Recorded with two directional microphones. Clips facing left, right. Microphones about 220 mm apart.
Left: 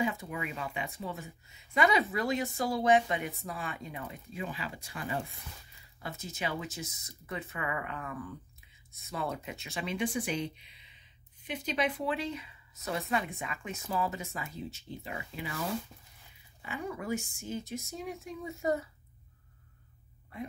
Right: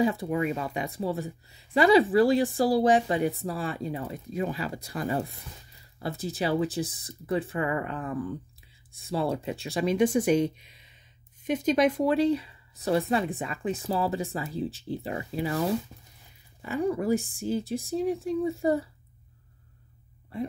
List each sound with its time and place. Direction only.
0.0 s speech: 35° right (ahead or behind)
16.6 s speech: 35° right (ahead or behind)